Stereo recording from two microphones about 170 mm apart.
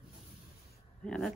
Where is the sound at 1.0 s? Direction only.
5° left (ahead or behind).